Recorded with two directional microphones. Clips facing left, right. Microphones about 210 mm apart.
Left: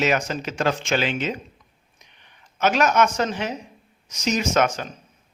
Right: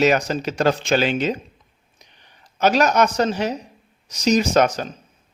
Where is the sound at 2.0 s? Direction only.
35° right (ahead or behind).